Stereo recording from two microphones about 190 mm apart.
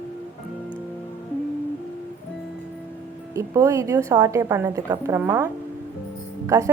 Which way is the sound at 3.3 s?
15° right (ahead or behind).